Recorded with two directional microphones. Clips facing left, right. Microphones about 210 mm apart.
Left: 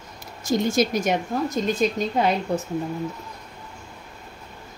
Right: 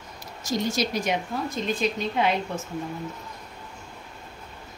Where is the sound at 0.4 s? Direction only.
50° left (ahead or behind).